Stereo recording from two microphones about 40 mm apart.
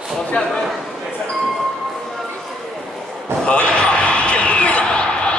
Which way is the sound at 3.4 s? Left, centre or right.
Left.